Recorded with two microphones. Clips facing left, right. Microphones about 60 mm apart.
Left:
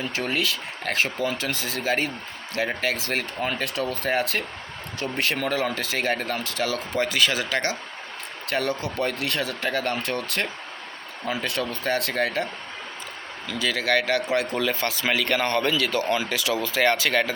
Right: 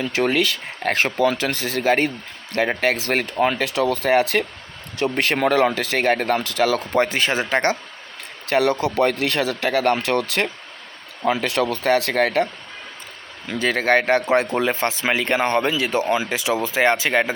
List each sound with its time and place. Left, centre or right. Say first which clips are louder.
0.0 s speech: right 7 dB; right
0.9 s speech: right 1 dB; right
1.2 s speech: right 7 dB; right
5.1 s speech: right 6 dB; right
8.5 s speech: right 8 dB; right
13.5 s speech: right 5 dB; right